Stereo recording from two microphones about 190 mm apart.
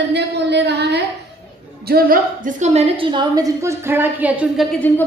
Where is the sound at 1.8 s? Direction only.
50° right (ahead or behind); by 4.6 s 5° right (ahead or behind).